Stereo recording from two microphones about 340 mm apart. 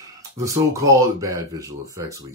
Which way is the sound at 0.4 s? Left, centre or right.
Centre.